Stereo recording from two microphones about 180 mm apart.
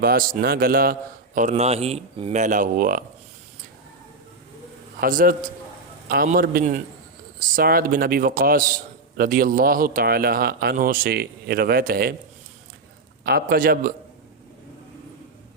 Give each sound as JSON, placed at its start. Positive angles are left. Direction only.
{"t": 0.0, "sound": "a man's voice", "side_deg": -55}
{"t": 1.4, "sound": "a man's voice", "side_deg": -40}
{"t": 2.4, "sound": "speech", "side_deg": -45}
{"t": 4.9, "sound": "a man's voice", "side_deg": -50}
{"t": 13.2, "sound": "a man's voice", "side_deg": -60}